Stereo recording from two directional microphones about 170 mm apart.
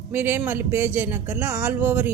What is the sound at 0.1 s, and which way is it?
A woman's voice, 15° right (ahead or behind).